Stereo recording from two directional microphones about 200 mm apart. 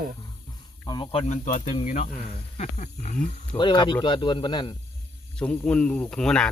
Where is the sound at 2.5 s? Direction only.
35° left (ahead or behind).